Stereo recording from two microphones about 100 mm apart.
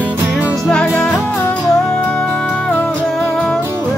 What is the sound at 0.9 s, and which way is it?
Music, 10° left (ahead or behind).